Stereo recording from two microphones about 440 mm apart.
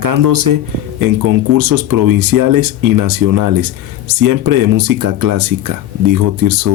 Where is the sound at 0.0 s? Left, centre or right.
Right.